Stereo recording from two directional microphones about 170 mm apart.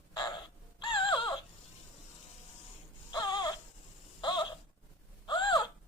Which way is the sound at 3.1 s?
25° left (ahead or behind).